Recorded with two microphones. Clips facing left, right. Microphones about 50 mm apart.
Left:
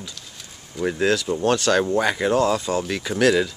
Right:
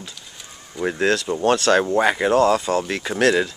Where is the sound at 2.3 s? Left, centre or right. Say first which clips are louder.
Right 3 dB; centre.